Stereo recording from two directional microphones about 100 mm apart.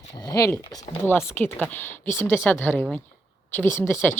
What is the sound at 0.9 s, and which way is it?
Speech, 20° left (ahead or behind).